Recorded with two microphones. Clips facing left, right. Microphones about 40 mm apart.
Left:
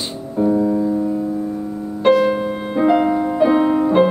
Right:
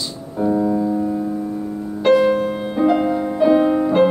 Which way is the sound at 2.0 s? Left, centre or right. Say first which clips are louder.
Even; centre.